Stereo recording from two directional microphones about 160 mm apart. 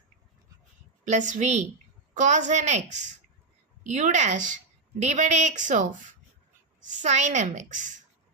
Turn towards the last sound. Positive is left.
turn(degrees=-50)  # may be behind; listen again after turning